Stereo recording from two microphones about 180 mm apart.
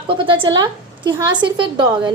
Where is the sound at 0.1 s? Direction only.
30° right (ahead or behind).